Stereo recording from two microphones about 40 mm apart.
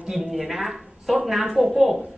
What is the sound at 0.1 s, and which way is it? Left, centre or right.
A man's voice, centre.